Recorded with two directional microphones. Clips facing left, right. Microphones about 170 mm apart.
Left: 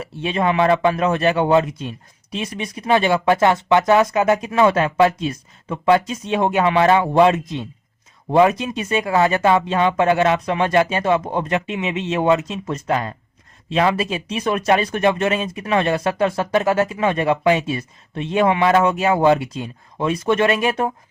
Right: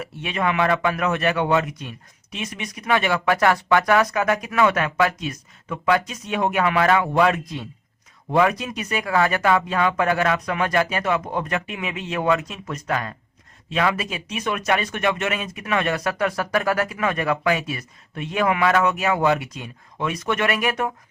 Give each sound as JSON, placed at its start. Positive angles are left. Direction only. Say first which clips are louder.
{"t": 0.0, "sound": "a man's voice", "louder": "left 4 dB", "side_deg": 30}